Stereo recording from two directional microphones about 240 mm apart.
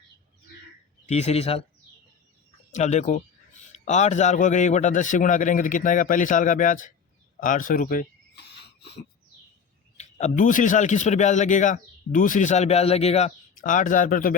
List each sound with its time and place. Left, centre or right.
1.0 s speech: left
2.7 s a man's voice: left
7.3 s a sound: left
10.0 s a man's voice: left